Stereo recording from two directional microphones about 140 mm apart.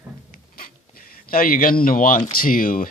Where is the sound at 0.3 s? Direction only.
90° left.